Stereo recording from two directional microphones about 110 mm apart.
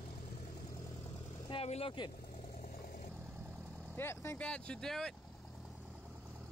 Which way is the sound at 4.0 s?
20° left (ahead or behind).